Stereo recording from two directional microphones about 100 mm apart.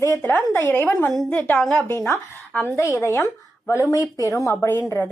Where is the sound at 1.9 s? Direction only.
30° left (ahead or behind).